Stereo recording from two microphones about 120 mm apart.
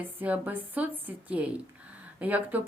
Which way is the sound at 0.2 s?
15° right (ahead or behind).